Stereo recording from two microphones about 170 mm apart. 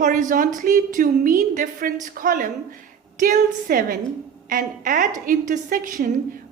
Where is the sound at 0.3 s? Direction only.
50° right (ahead or behind).